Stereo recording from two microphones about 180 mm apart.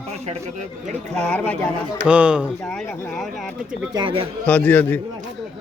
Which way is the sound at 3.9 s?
30° right (ahead or behind).